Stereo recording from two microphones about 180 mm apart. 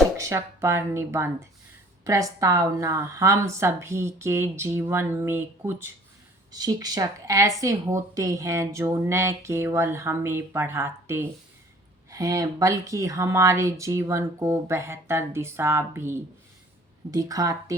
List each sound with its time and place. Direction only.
0.2 s speech: 15° right (ahead or behind)